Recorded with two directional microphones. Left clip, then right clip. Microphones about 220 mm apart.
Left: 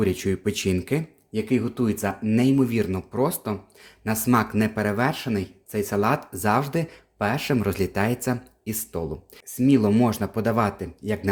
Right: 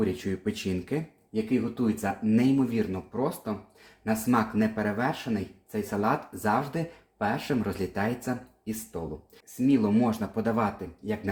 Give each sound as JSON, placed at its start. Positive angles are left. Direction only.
{"t": 0.0, "sound": "speech", "side_deg": 45}